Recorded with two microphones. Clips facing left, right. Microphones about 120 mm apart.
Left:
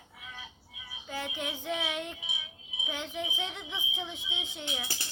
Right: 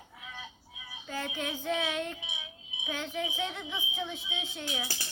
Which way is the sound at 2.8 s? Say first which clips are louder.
Right 2 dB; 15° left (ahead or behind).